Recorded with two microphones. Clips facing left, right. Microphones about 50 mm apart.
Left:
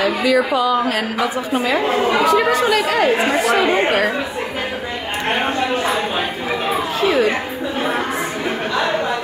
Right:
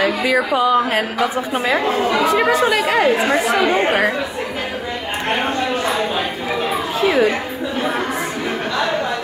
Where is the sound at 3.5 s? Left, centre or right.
Centre.